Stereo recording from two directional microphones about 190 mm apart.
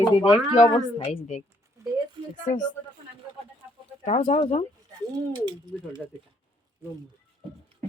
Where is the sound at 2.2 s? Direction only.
25° right (ahead or behind).